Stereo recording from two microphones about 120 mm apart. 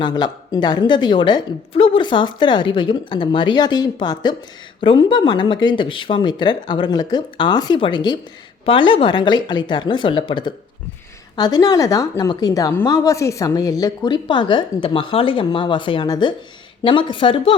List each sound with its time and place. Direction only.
0.0 s a woman's voice: 35° left (ahead or behind)